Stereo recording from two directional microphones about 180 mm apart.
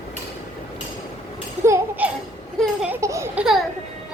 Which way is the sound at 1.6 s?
10° right (ahead or behind).